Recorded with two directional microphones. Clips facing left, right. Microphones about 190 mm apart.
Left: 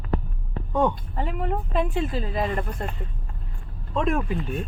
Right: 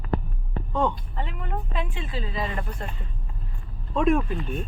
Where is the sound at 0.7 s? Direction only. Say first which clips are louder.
Left 3 dB; 15° left (ahead or behind).